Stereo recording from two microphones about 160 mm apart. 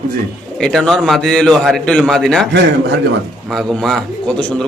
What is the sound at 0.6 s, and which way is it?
A man's voice, 5° left (ahead or behind).